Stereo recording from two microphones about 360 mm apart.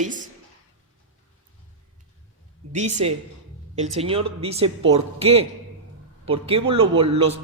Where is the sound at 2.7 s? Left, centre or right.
Centre.